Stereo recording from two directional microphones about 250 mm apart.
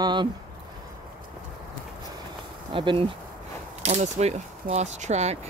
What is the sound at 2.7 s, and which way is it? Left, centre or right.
Speech, centre.